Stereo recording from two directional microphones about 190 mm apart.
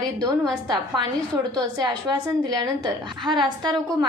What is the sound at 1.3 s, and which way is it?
A woman's voice, 20° right (ahead or behind).